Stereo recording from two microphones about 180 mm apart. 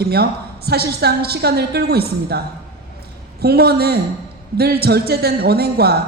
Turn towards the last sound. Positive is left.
turn(degrees=-60)  # may be behind; listen again after turning